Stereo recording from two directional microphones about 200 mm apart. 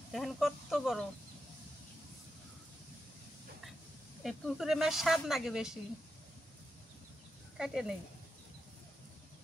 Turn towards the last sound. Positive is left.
turn(degrees=-5)  # may be behind; listen again after turning